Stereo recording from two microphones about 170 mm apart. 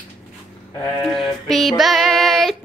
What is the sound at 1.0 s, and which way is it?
Child singing, centre (ahead or behind).